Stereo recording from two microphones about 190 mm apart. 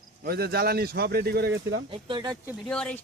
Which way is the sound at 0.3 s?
55° right (ahead or behind).